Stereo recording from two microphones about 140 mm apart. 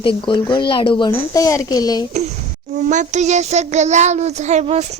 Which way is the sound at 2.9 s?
60° right (ahead or behind).